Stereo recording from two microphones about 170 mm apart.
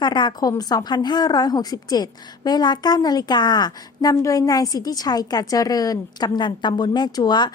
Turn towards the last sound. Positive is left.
turn(degrees=25)  # may be behind; listen again after turning